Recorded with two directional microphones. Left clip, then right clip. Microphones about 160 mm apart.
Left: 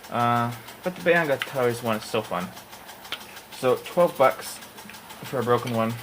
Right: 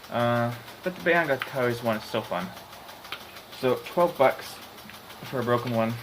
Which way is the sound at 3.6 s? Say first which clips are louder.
Left 3 dB; 50° left (ahead or behind).